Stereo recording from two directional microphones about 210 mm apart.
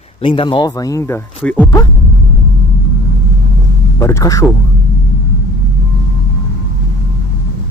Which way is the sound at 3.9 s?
15° left (ahead or behind).